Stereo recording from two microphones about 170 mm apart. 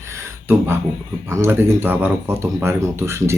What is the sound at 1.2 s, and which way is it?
Speech, 15° right (ahead or behind).